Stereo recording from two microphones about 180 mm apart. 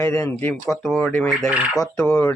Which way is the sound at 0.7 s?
Centre (ahead or behind).